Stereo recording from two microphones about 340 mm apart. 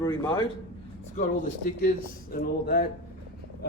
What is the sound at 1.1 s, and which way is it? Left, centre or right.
Speech, left.